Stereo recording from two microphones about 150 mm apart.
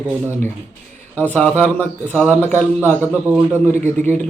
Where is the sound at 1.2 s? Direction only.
10° left (ahead or behind).